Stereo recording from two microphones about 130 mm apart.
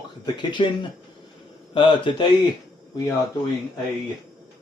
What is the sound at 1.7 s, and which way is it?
Speech, 40° left (ahead or behind).